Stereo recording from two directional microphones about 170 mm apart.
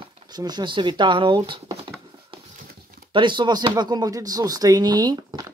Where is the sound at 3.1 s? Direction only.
30° right (ahead or behind).